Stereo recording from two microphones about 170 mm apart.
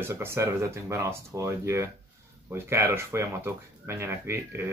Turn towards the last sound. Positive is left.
turn(degrees=-15)  # may be behind; listen again after turning